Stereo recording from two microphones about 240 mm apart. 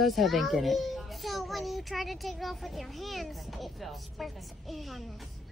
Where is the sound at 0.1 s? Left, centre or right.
Centre.